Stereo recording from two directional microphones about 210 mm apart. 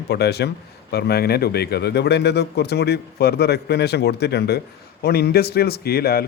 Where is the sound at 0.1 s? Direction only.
50° left (ahead or behind).